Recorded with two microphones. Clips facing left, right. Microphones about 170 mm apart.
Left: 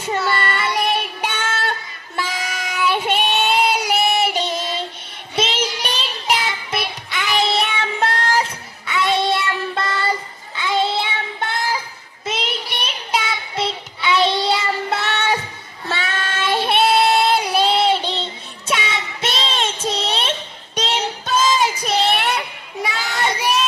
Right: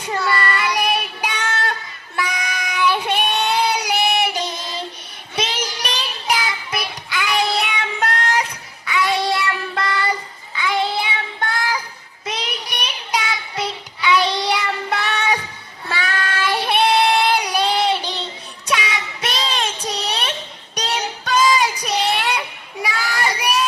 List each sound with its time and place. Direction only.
0.0 s child singing: 25° left (ahead or behind)
20.7 s music: 25° left (ahead or behind)
21.4 s child singing: 25° left (ahead or behind)